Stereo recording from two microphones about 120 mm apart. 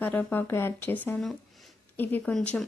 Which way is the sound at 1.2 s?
Centre (ahead or behind).